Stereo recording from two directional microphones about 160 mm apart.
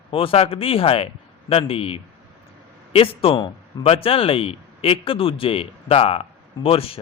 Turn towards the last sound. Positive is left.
turn(degrees=35)  # may be behind; listen again after turning